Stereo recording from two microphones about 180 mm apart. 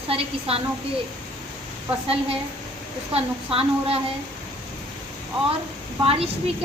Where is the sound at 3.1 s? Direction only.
30° right (ahead or behind).